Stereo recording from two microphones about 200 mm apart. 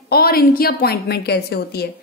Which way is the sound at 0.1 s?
50° left (ahead or behind).